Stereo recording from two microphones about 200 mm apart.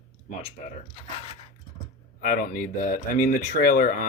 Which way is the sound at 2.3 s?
45° left (ahead or behind).